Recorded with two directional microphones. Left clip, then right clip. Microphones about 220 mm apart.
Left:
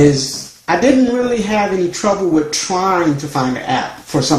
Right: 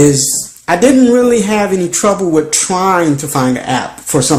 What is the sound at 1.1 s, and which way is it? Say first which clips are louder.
Speech: right 6 dB; 50° right (ahead or behind).